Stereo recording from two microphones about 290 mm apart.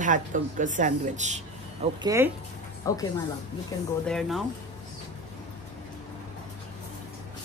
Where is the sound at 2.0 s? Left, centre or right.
Centre.